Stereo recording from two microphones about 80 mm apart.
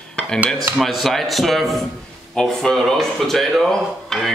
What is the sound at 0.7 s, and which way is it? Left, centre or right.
A man's voice, centre.